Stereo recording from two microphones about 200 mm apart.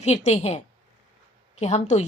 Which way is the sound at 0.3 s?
35° left (ahead or behind).